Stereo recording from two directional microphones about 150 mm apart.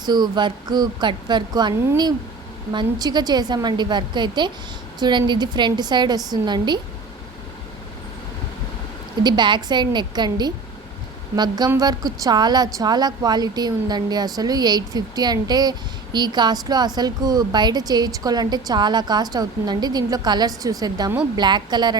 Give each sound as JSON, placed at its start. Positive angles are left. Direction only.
{"t": 0.0, "sound": "a woman's voice", "side_deg": -30}
{"t": 2.7, "sound": "a woman's voice", "side_deg": -30}
{"t": 9.2, "sound": "a woman's voice", "side_deg": -30}